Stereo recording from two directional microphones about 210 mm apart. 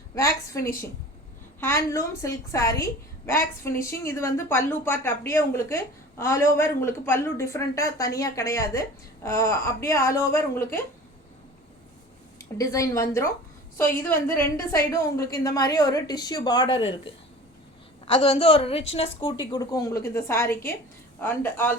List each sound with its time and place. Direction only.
0.1 s a woman's voice: 15° left (ahead or behind)
12.4 s a woman's voice: 15° left (ahead or behind)
18.0 s a woman's voice: 25° left (ahead or behind); by 21.8 s 10° left (ahead or behind)